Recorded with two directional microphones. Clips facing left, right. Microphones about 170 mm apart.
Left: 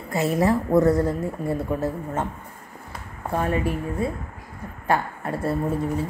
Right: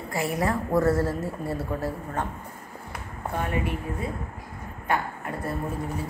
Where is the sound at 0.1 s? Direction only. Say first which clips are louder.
Left 6 dB; 25° left (ahead or behind).